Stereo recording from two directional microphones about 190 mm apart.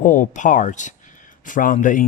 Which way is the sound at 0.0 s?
45° left (ahead or behind).